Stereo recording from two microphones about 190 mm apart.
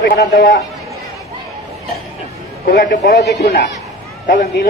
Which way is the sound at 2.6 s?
50° left (ahead or behind).